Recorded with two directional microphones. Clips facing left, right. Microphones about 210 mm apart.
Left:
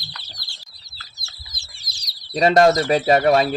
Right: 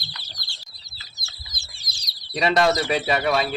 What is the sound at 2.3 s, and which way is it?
Speech, 45° left (ahead or behind).